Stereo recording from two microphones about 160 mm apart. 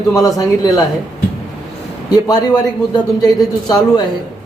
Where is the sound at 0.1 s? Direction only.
20° left (ahead or behind).